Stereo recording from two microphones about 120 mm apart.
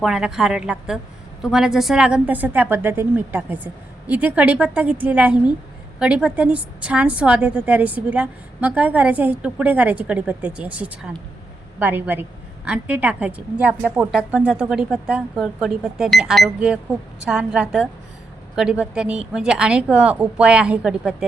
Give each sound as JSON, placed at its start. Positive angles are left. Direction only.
{"t": 0.0, "sound": "a woman's voice", "side_deg": -5}